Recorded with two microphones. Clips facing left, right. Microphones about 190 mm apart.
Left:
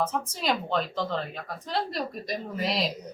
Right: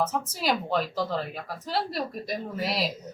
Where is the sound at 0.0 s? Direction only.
5° right (ahead or behind).